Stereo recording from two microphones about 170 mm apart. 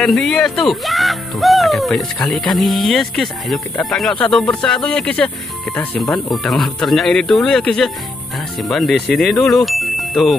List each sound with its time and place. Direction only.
0.0 s speech: centre (ahead or behind)
9.7 s music: centre (ahead or behind)